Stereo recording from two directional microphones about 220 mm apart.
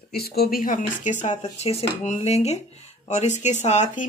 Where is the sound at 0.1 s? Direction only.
45° left (ahead or behind).